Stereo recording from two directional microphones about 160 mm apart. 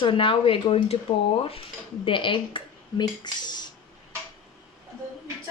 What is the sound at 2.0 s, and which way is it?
Speech, 30° left (ahead or behind).